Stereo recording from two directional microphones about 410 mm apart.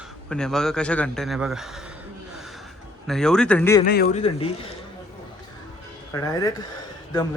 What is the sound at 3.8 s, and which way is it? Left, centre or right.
Speech, left.